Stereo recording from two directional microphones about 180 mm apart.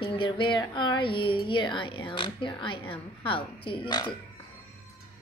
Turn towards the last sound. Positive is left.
turn(degrees=25)  # may be behind; listen again after turning